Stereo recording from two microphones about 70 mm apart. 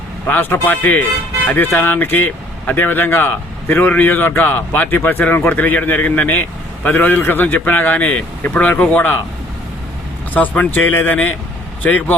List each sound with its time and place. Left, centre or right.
0.3 s speech: left
10.3 s speech: left